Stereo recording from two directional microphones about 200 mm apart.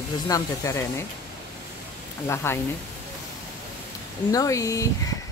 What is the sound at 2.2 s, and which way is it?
Speech, 10° left (ahead or behind).